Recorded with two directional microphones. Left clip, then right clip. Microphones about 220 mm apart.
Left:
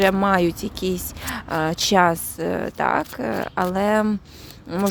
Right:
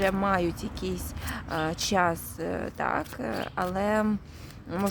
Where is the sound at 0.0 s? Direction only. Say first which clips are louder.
Left 8 dB; 30° left (ahead or behind).